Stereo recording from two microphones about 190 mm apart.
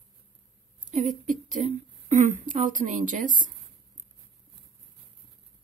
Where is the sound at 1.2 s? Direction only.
40° right (ahead or behind).